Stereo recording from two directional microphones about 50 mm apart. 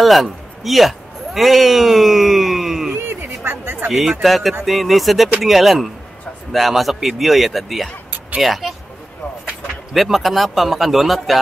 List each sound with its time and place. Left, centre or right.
0.0 s a man's voice: centre
2.9 s a sound: right
3.9 s speech: centre
9.9 s speech: centre